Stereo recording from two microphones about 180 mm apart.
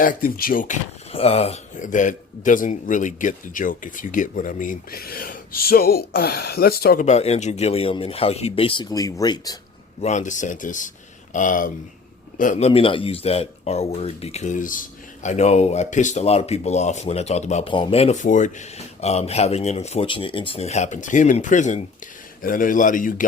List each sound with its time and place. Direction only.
0.0 s a man's voice: 50° left (ahead or behind)
1.1 s a man's voice: 35° left (ahead or behind); by 7.0 s 60° left (ahead or behind)
7.0 s speech: 35° left (ahead or behind); by 9.6 s 20° left (ahead or behind)
10.0 s a man's voice: 40° left (ahead or behind)